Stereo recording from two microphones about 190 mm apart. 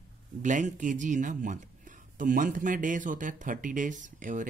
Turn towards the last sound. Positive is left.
turn(degrees=-45)  # may be behind; listen again after turning